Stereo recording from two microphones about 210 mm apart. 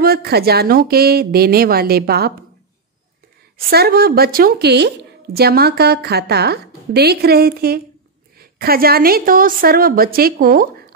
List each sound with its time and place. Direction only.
0.0 s speech: 50° right (ahead or behind)
3.5 s speech: 50° right (ahead or behind)